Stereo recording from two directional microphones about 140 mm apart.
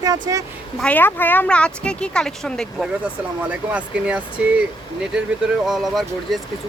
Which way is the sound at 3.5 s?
10° right (ahead or behind).